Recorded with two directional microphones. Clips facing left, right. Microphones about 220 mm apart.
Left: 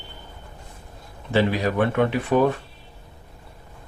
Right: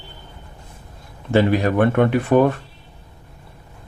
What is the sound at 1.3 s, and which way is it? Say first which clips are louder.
Speech: right 4 dB; 50° right (ahead or behind).